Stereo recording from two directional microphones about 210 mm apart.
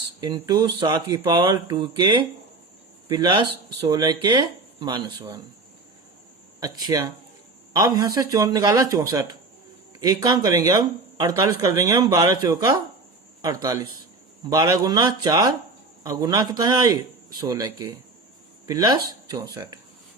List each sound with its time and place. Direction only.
0.2 s speech: 20° right (ahead or behind)
6.6 s speech: 20° right (ahead or behind)